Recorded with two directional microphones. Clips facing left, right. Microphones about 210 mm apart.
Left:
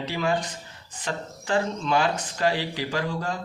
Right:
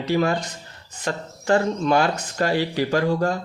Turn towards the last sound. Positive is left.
turn(degrees=-50)  # may be behind; listen again after turning